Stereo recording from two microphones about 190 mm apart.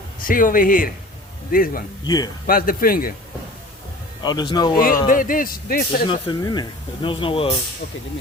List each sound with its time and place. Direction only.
0.2 s speech: 45° left (ahead or behind)
2.0 s speech: 20° left (ahead or behind)
2.5 s speech: 50° left (ahead or behind)
4.2 s speech: 20° left (ahead or behind)
5.0 s speech: 45° left (ahead or behind)
6.1 s speech: 25° left (ahead or behind)